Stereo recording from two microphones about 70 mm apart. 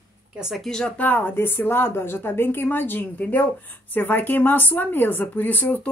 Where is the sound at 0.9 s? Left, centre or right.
Left.